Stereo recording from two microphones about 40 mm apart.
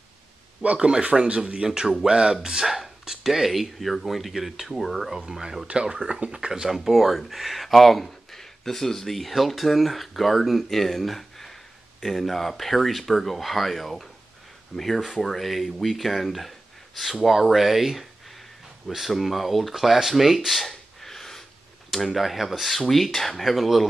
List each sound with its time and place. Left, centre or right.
0.7 s speech: right
2.6 s speech: centre
5.4 s speech: centre
5.7 s speech: right
6.7 s speech: centre